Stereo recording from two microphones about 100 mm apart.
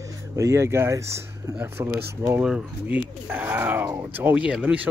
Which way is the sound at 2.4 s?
10° right (ahead or behind).